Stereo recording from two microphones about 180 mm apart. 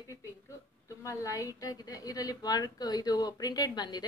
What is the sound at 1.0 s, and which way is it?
Speech, 20° left (ahead or behind).